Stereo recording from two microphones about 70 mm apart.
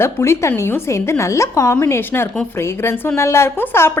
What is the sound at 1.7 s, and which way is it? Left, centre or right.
A woman's voice, left.